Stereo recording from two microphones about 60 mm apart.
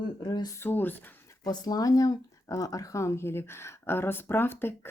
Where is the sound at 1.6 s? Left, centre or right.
Left.